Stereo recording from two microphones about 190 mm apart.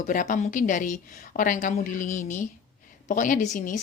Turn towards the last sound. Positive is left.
turn(degrees=40)  # may be behind; listen again after turning